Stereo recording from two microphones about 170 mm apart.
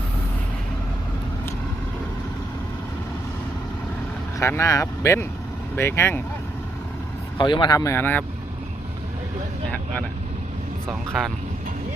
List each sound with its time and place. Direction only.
4.4 s speech: 15° left (ahead or behind)
7.3 s speech: 25° left (ahead or behind)
11.1 s speech: centre (ahead or behind)